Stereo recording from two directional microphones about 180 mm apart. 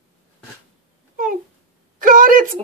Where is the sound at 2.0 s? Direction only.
50° right (ahead or behind).